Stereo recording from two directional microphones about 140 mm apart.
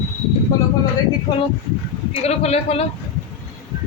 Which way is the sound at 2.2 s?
45° left (ahead or behind).